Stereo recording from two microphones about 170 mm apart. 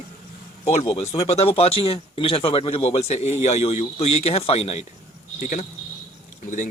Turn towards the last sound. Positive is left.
turn(degrees=50)  # may be behind; listen again after turning